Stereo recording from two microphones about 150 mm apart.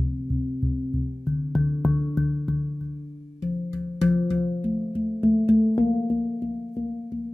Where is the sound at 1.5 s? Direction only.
5° left (ahead or behind).